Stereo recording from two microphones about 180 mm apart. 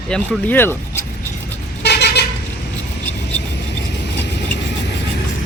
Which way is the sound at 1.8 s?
65° left (ahead or behind).